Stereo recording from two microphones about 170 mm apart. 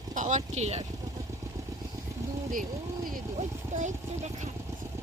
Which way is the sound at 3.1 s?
45° right (ahead or behind).